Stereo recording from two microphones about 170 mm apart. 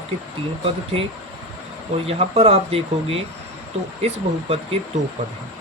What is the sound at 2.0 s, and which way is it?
Speech, 35° right (ahead or behind).